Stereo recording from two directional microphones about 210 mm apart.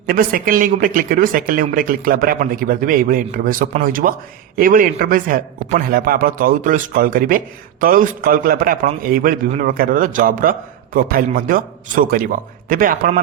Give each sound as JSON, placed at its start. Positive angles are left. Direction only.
{"t": 0.1, "sound": "a man's voice", "side_deg": -40}